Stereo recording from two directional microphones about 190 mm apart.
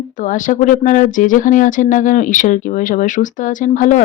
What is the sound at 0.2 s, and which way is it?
Speech, 45° left (ahead or behind).